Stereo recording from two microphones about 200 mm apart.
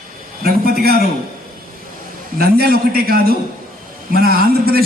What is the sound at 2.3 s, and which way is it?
A man's voice, 50° right (ahead or behind).